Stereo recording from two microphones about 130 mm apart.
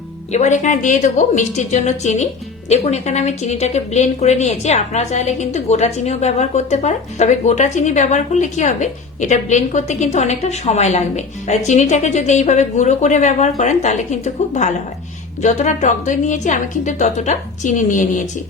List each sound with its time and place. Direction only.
0.3 s a woman's voice: 65° left (ahead or behind)